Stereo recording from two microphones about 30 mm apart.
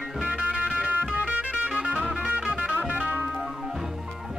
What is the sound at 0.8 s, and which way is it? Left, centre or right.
Music, right.